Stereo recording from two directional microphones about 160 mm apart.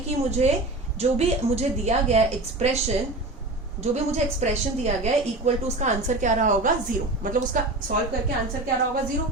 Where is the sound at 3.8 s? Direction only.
45° right (ahead or behind).